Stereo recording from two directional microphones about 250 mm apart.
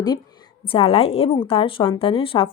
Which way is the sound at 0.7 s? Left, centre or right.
Left.